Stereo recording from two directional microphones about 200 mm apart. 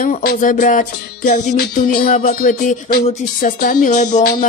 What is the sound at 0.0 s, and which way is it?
Speech, 45° left (ahead or behind).